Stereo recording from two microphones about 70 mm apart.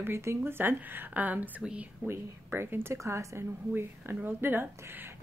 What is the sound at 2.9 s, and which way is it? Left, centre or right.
Speech, right.